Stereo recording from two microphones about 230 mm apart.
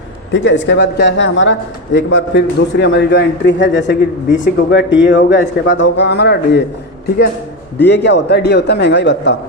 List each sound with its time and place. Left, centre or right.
0.3 s a man's voice: left
7.8 s a man's voice: left